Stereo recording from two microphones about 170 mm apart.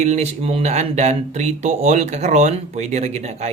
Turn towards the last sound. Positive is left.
turn(degrees=-40)  # may be behind; listen again after turning